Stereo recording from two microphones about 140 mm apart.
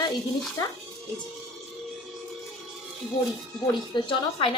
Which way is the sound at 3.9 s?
40° left (ahead or behind).